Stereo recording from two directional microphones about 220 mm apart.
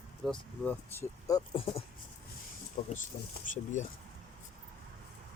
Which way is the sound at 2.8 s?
40° left (ahead or behind).